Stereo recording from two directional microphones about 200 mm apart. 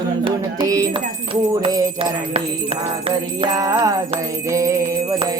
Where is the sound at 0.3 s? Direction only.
20° right (ahead or behind).